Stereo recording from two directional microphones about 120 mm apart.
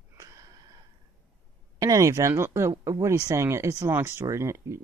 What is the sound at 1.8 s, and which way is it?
Speech, 30° right (ahead or behind).